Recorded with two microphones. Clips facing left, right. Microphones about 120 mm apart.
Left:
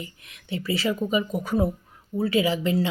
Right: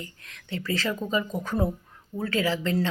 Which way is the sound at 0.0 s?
10° left (ahead or behind).